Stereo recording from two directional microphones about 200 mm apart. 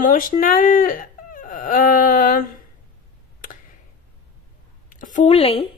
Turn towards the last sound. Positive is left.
turn(degrees=30)  # may be behind; listen again after turning